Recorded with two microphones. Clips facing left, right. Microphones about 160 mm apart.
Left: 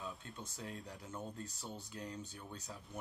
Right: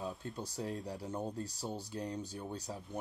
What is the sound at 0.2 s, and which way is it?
Speech, 35° right (ahead or behind).